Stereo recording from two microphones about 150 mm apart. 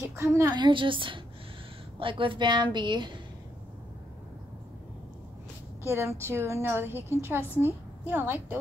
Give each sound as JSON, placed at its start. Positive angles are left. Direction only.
{"t": 0.1, "sound": "speech", "side_deg": -20}
{"t": 0.6, "sound": "a woman's voice", "side_deg": -35}
{"t": 5.9, "sound": "a woman's voice", "side_deg": -15}